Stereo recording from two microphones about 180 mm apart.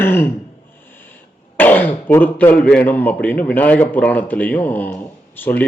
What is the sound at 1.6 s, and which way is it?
Speech, 10° left (ahead or behind).